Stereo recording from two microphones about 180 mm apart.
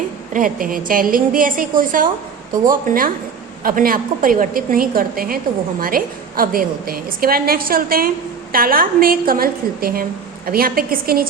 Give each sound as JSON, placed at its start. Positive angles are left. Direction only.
{"t": 0.3, "sound": "a woman's voice", "side_deg": -50}